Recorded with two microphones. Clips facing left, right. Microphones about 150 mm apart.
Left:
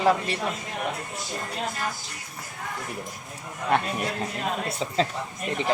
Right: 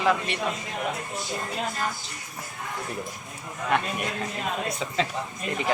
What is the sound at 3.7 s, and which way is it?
Speech, 35° left (ahead or behind).